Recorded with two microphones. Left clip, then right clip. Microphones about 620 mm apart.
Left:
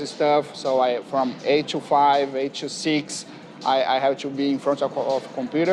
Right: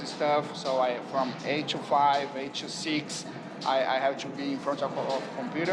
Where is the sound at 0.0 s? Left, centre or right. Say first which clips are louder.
Left 7 dB; left.